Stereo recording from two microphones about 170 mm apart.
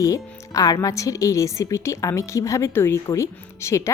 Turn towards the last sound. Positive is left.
turn(degrees=15)  # may be behind; listen again after turning